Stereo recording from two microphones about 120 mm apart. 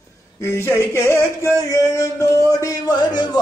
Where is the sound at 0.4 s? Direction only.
20° left (ahead or behind).